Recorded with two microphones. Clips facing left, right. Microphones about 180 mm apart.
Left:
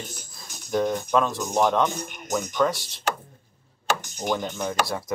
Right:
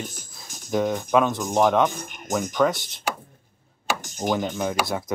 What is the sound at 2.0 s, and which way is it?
Speech, 50° right (ahead or behind).